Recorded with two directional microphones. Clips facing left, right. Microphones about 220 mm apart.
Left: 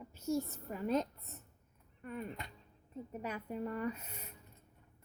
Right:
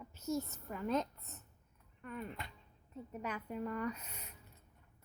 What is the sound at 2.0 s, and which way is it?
A woman's voice, 35° left (ahead or behind).